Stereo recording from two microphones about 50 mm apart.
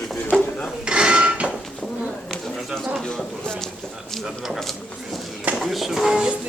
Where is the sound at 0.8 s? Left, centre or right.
Centre.